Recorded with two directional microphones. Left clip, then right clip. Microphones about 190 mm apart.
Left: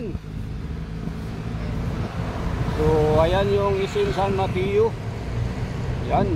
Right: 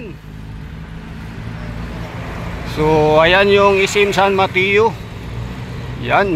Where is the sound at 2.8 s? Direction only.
40° right (ahead or behind).